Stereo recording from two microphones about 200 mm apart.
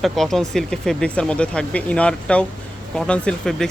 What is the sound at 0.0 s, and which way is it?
Speech, centre (ahead or behind).